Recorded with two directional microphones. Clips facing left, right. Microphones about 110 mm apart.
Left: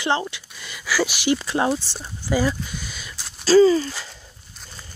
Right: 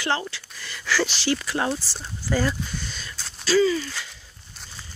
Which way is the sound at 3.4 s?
35° left (ahead or behind).